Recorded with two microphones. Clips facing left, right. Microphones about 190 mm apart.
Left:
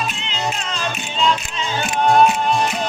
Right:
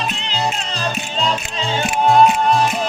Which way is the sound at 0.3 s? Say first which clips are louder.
Right 4 dB; 35° right (ahead or behind).